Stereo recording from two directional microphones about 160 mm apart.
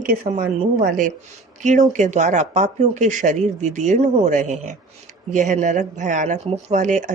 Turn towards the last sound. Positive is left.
turn(degrees=-50)  # may be behind; listen again after turning